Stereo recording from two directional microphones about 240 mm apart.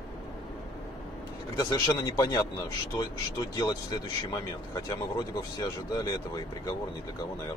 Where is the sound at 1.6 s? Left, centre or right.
Centre.